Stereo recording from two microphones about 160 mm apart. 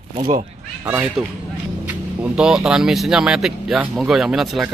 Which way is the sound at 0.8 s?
15° right (ahead or behind).